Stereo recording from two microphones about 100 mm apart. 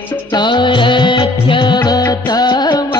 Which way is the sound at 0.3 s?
50° left (ahead or behind).